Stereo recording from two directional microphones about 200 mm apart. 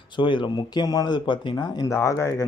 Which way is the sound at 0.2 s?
25° left (ahead or behind).